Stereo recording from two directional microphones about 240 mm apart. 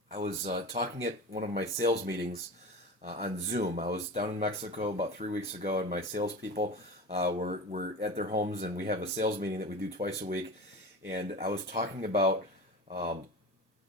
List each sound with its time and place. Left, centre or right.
0.1 s speech: right
3.0 s speech: right
3.4 s speech: right
4.7 s speech: right
11.1 s speech: right
11.3 s speech: right